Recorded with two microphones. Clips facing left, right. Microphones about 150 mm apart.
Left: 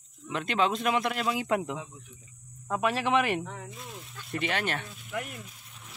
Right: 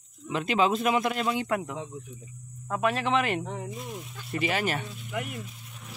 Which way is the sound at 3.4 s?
20° right (ahead or behind).